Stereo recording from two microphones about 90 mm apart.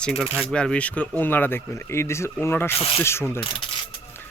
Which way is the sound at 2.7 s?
90° left.